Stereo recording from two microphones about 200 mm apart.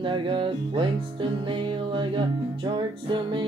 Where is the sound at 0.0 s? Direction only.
25° right (ahead or behind).